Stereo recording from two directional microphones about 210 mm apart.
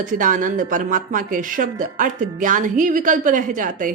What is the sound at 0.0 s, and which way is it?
A woman's voice, 40° right (ahead or behind).